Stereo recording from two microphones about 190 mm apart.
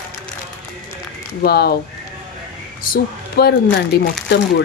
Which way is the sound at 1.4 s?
55° left (ahead or behind).